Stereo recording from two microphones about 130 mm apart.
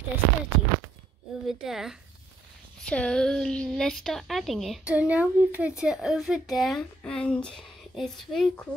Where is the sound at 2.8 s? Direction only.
5° left (ahead or behind).